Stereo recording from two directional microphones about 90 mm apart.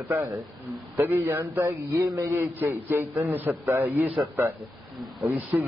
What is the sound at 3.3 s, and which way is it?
A man's voice, 25° right (ahead or behind).